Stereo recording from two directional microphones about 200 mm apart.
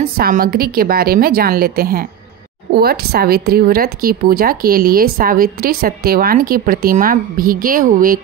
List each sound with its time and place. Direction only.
0.0 s speech: 45° right (ahead or behind)